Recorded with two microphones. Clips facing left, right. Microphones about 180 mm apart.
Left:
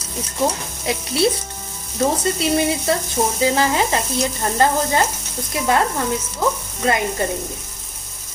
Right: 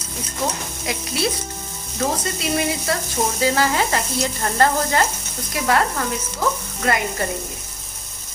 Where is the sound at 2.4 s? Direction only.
25° left (ahead or behind).